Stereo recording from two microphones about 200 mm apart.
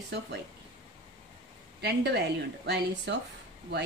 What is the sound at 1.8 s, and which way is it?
Speech, 55° right (ahead or behind).